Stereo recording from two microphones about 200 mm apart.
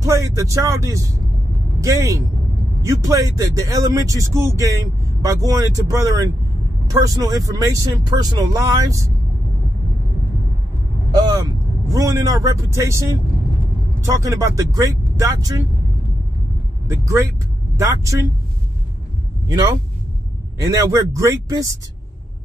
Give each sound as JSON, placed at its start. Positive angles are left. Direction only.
{"t": 0.0, "sound": "speech", "side_deg": -15}
{"t": 11.1, "sound": "speech", "side_deg": -20}
{"t": 14.0, "sound": "speech", "side_deg": -15}
{"t": 17.0, "sound": "speech", "side_deg": -15}
{"t": 19.4, "sound": "speech", "side_deg": -20}
{"t": 20.7, "sound": "speech", "side_deg": -15}